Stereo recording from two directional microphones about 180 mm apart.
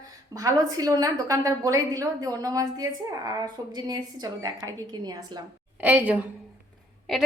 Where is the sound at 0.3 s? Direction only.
20° right (ahead or behind).